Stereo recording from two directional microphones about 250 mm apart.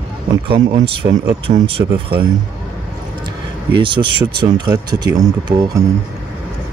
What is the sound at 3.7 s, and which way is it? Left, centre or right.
Speech, centre.